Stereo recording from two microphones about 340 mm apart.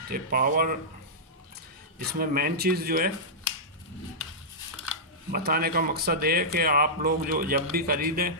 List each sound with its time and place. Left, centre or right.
0.1 s a man's voice: right
2.1 s a man's voice: right
5.3 s a man's voice: right